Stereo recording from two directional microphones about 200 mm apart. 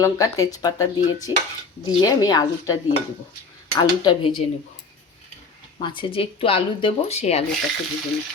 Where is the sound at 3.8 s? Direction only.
20° left (ahead or behind).